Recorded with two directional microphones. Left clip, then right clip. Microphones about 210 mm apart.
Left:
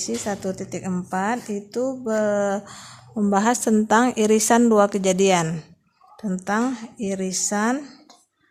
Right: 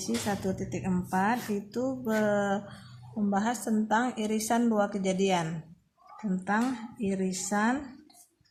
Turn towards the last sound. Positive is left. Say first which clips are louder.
# left 6 dB
turn(degrees=35)  # may be behind; listen again after turning